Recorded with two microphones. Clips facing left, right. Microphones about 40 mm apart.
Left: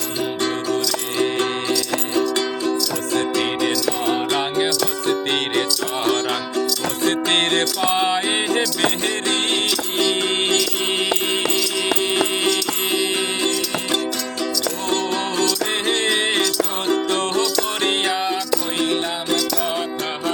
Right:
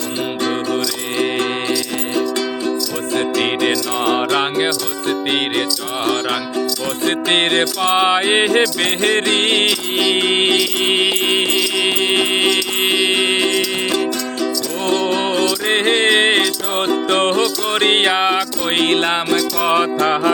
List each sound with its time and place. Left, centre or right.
1.2 s music: centre
5.0 s music: centre; by 13.6 s right
14.8 s music: right
18.8 s music: right